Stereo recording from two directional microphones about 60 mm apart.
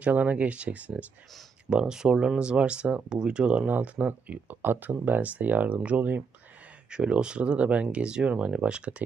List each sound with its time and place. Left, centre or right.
0.0 s speech: right
1.7 s speech: centre; by 6.2 s right
6.9 s speech: centre